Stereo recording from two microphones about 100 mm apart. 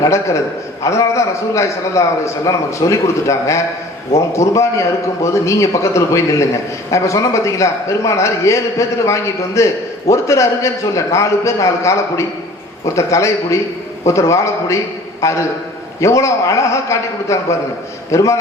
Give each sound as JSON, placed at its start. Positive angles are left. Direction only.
{"t": 0.0, "sound": "a man's voice", "side_deg": 30}